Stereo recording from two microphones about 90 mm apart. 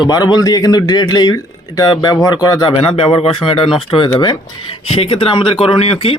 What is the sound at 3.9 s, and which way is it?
Speech, 60° left (ahead or behind).